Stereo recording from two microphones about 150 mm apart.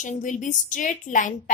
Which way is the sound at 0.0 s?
55° left (ahead or behind).